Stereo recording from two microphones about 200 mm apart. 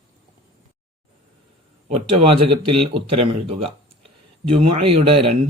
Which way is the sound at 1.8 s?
30° right (ahead or behind).